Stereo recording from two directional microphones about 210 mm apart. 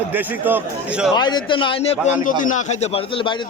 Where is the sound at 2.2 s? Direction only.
35° left (ahead or behind).